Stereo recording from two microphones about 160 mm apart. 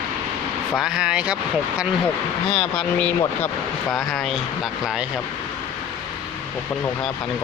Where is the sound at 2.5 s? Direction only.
5° left (ahead or behind).